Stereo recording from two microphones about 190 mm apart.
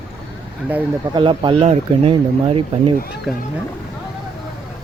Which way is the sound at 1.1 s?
25° right (ahead or behind).